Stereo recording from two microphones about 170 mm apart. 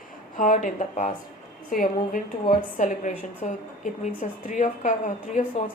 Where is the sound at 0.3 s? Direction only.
50° left (ahead or behind).